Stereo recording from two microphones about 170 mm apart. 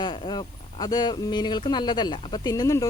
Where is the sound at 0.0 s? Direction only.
25° left (ahead or behind).